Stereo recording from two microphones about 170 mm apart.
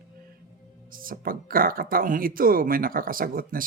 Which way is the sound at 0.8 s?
55° right (ahead or behind).